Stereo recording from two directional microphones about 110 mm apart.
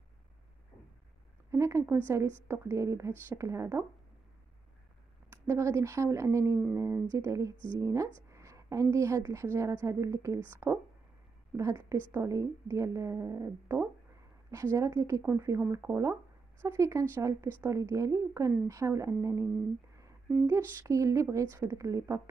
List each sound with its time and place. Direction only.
1.5 s a woman's voice: 25° right (ahead or behind)
5.3 s a woman's voice: 25° right (ahead or behind)